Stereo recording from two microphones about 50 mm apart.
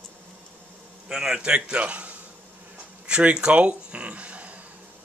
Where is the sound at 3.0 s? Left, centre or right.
Right.